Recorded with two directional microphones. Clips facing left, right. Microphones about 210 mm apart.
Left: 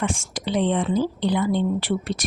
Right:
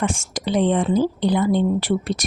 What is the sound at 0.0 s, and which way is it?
A woman's voice, 45° right (ahead or behind).